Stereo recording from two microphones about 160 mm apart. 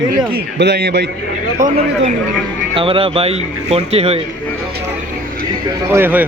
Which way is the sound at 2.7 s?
35° right (ahead or behind).